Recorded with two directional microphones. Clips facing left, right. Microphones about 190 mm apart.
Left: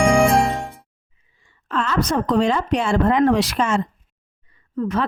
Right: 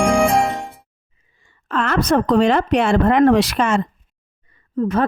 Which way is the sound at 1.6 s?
60° right (ahead or behind).